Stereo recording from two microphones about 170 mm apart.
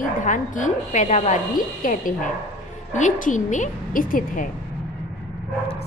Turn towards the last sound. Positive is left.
turn(degrees=55)  # may be behind; listen again after turning